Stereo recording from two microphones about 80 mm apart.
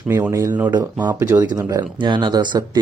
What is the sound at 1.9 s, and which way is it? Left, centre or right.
Speech, right.